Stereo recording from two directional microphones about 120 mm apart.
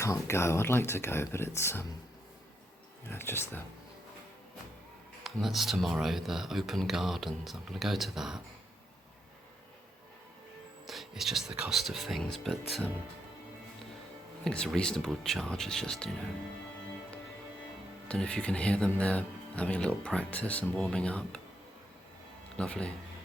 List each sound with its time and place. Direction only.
0.0 s speech: 25° left (ahead or behind)
3.1 s speech: 20° left (ahead or behind)
5.2 s speech: centre (ahead or behind)
10.8 s speech: centre (ahead or behind)
14.4 s speech: 5° left (ahead or behind)
18.1 s speech: 5° left (ahead or behind)
22.5 s speech: 10° left (ahead or behind)